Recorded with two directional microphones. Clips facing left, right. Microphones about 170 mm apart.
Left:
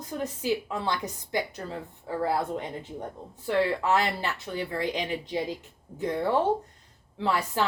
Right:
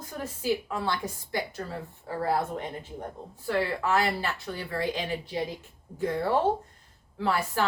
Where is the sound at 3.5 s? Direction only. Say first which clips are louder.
Left 2 dB; 20° left (ahead or behind).